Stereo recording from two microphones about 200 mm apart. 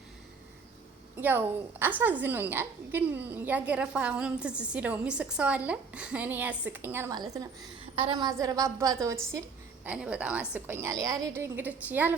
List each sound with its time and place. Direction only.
1.1 s a woman's voice: 10° right (ahead or behind)
9.8 s a woman's voice: 5° right (ahead or behind)